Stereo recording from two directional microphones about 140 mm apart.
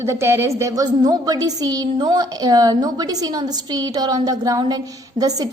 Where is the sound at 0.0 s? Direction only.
20° right (ahead or behind).